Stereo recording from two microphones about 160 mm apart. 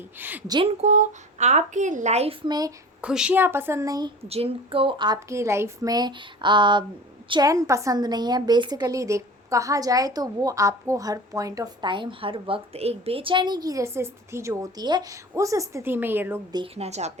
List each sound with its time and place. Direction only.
0.2 s a woman's voice: 10° right (ahead or behind)
0.4 s a woman's voice: 25° right (ahead or behind)
0.8 s a woman's voice: 45° right (ahead or behind)
2.5 s a woman's voice: 25° right (ahead or behind)
3.0 s a woman's voice: 5° right (ahead or behind); by 4.1 s 20° right (ahead or behind)
4.3 s a woman's voice: 35° right (ahead or behind); by 16.4 s 15° right (ahead or behind)
16.7 s a woman's voice: 40° right (ahead or behind)